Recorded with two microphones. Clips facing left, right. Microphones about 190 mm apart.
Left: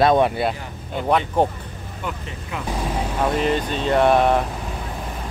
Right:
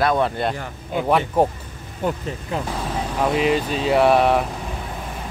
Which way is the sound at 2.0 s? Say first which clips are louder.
Right 7 dB; 40° right (ahead or behind).